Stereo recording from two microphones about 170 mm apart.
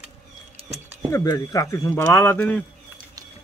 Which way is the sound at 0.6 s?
35° right (ahead or behind).